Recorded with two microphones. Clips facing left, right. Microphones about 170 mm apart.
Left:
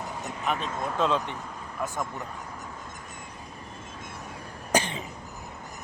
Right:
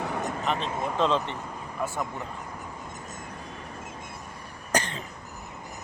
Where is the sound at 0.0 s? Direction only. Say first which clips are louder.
Right 5 dB; 65° right (ahead or behind).